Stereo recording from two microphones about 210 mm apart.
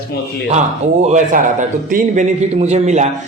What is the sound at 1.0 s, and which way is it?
A man's voice, 35° right (ahead or behind).